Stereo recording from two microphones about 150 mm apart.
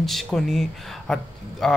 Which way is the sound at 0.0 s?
Centre (ahead or behind).